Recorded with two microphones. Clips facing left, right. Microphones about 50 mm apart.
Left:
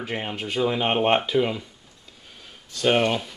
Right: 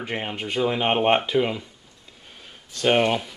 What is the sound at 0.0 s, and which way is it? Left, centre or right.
Speech, centre.